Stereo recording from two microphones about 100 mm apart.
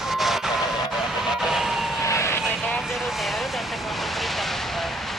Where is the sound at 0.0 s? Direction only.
Centre (ahead or behind).